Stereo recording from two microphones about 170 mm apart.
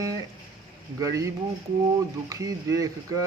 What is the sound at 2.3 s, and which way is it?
Speech, 20° right (ahead or behind).